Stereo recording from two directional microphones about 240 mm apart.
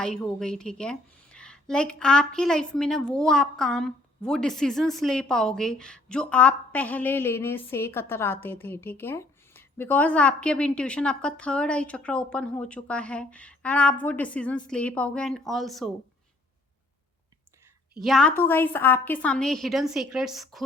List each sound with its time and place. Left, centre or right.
0.0 s a woman's voice: centre
18.0 s a woman's voice: centre